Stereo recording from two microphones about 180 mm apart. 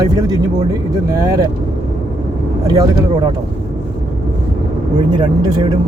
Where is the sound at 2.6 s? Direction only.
20° right (ahead or behind).